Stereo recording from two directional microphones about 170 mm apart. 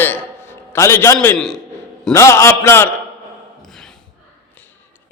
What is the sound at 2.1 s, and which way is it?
Speech, 15° left (ahead or behind).